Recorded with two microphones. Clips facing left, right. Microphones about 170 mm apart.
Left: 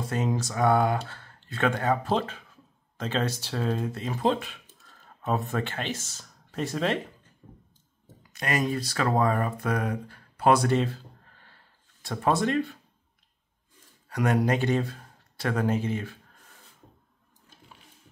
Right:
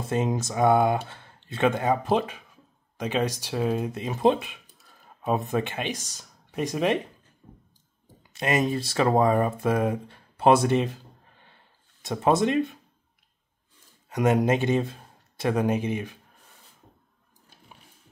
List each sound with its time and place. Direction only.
0.1 s speech: 20° right (ahead or behind)
8.2 s speech: 25° right (ahead or behind)
14.0 s speech: 20° right (ahead or behind)